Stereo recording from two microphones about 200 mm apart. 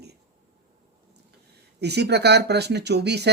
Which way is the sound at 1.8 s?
55° right (ahead or behind).